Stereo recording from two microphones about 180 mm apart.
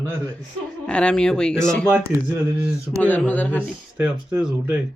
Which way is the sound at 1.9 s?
15° right (ahead or behind).